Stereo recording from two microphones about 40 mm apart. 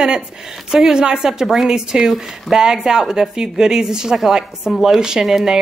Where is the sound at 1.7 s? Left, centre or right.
Centre.